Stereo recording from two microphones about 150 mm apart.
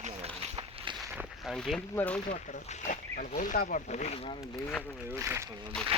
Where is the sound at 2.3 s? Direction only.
55° left (ahead or behind).